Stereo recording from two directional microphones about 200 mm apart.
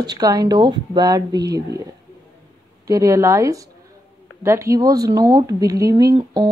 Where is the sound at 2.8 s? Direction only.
15° right (ahead or behind).